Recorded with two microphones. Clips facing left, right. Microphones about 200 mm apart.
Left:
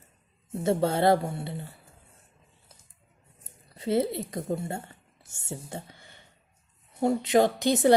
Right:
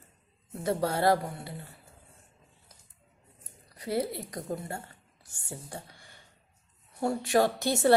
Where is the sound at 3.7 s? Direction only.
25° left (ahead or behind).